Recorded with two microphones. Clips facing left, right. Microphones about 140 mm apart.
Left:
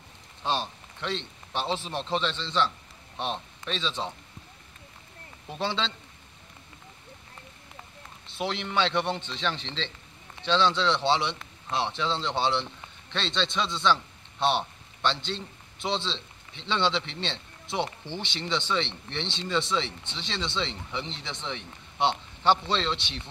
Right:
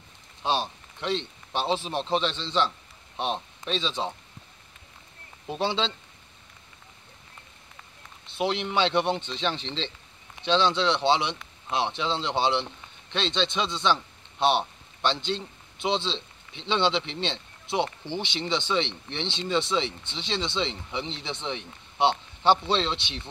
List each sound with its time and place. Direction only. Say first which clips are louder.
0.5 s a man's voice: right 2 dB; 25° right (ahead or behind)
5.5 s speech: right 3 dB; 25° right (ahead or behind)
8.4 s a man's voice: right 3 dB; 20° right (ahead or behind)